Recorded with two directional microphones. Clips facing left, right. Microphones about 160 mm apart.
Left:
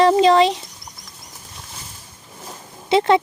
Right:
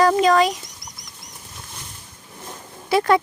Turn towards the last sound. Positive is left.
turn(degrees=25)  # may be behind; listen again after turning